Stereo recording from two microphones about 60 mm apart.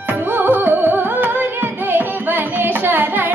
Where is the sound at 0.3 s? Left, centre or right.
Right.